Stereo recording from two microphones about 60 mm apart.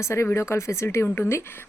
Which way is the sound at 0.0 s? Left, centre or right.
Left.